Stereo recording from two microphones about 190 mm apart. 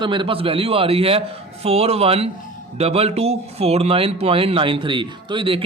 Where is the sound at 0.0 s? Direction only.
25° right (ahead or behind).